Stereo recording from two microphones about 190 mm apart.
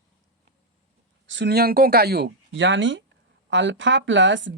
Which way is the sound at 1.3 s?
65° right (ahead or behind).